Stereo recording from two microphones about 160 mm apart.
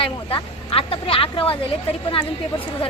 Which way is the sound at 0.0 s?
35° left (ahead or behind).